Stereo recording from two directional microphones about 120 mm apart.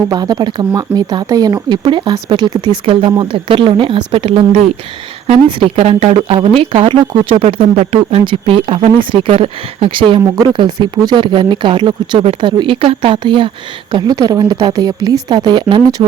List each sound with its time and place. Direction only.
0.1 s speech: 35° right (ahead or behind)
10.2 s speech: 30° right (ahead or behind)
10.5 s speech: 40° right (ahead or behind)
13.9 s speech: 35° right (ahead or behind)